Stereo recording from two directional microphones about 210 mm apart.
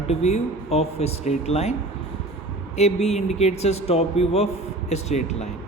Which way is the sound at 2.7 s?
30° left (ahead or behind).